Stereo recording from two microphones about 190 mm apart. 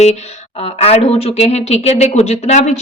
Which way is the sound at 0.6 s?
35° left (ahead or behind).